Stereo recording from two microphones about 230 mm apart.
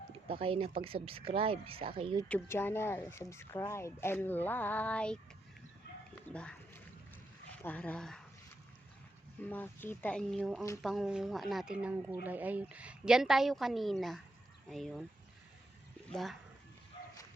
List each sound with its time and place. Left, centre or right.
0.3 s speech: right
2.2 s speech: centre
6.3 s music: centre
7.6 s speech: centre
9.4 s speech: centre
16.0 s speech: centre